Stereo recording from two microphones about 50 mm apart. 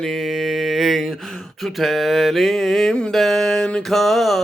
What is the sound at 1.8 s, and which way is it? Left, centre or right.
Mantra, centre.